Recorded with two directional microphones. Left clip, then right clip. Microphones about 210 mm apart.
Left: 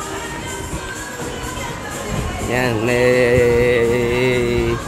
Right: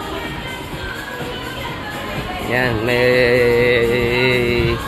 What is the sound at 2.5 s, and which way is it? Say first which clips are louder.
Music: even; 15° left (ahead or behind).